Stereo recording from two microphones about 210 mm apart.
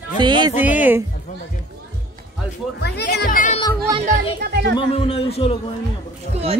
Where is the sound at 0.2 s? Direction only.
20° right (ahead or behind).